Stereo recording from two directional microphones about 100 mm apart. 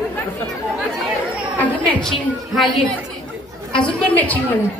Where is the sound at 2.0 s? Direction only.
Centre (ahead or behind).